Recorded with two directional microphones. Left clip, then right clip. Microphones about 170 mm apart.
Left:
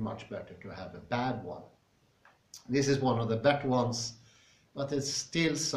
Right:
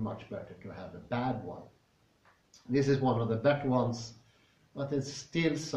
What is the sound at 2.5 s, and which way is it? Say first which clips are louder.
Speech: even; 15° left (ahead or behind).